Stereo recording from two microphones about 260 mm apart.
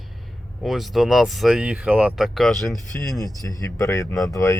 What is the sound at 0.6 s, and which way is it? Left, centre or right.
Speech, centre.